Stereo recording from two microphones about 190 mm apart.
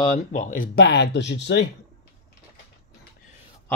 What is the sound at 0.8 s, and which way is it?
Speech, 60° left (ahead or behind).